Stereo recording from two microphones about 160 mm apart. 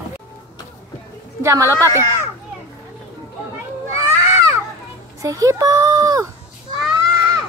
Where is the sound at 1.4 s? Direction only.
20° right (ahead or behind).